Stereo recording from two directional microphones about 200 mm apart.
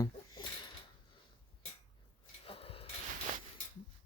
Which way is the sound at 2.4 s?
30° left (ahead or behind).